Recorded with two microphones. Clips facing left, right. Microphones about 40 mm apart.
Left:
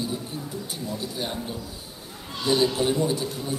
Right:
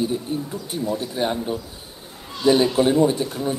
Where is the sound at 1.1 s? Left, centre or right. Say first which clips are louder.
Right 8 dB; right.